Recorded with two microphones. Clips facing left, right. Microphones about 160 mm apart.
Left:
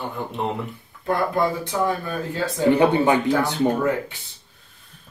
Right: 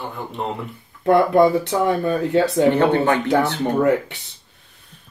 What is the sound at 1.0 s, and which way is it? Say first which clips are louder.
Speech: right 8 dB; 65° right (ahead or behind).